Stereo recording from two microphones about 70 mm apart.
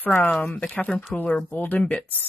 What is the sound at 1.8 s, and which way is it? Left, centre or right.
Speech, centre.